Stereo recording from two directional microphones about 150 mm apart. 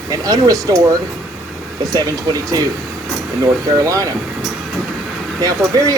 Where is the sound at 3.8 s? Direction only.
25° right (ahead or behind).